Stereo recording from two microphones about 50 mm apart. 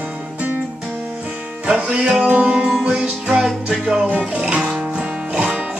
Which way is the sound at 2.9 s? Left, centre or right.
Right.